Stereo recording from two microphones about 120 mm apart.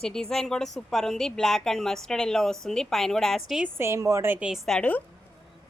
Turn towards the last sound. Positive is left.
turn(degrees=10)  # may be behind; listen again after turning